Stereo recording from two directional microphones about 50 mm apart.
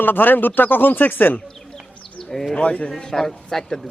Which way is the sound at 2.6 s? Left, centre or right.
Left.